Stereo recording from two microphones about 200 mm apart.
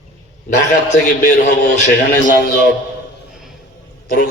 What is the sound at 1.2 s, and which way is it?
Speech, 40° left (ahead or behind).